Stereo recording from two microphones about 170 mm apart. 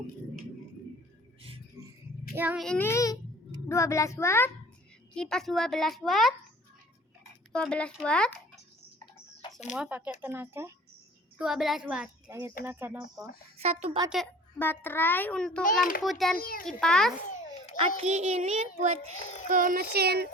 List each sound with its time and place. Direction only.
1.4 s music: 35° right (ahead or behind)
2.3 s speech: 10° right (ahead or behind)
2.6 s a child's voice: 5° left (ahead or behind)
5.1 s a woman's voice: 5° left (ahead or behind)
7.5 s a woman's voice: 5° left (ahead or behind)
9.7 s speech: 5° right (ahead or behind)
11.3 s a woman's voice: centre (ahead or behind); by 13.3 s 20° right (ahead or behind)
13.6 s a child's voice: 35° right (ahead or behind)
14.6 s a child's voice: 10° left (ahead or behind)
16.4 s a child's voice: 55° left (ahead or behind)
16.8 s a woman's voice: 5° left (ahead or behind)
17.7 s a child's voice: 35° right (ahead or behind)
19.1 s a child's voice: 45° left (ahead or behind)
19.5 s speech: 55° right (ahead or behind)